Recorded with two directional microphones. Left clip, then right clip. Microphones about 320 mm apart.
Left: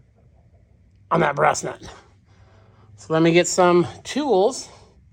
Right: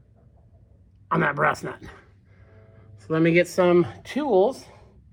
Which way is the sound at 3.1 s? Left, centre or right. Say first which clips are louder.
Left 3 dB; centre.